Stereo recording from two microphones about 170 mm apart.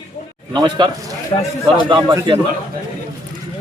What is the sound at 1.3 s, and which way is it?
Speech, 30° left (ahead or behind).